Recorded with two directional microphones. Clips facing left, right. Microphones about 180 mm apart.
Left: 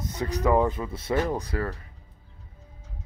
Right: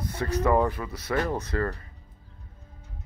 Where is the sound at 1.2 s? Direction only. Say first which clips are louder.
Even; 10° left (ahead or behind).